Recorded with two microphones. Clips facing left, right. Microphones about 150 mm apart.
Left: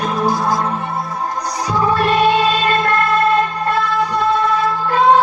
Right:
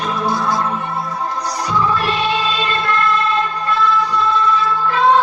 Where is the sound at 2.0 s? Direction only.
50° left (ahead or behind).